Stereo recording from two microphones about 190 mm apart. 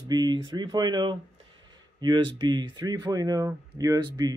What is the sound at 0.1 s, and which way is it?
Speech, 20° right (ahead or behind).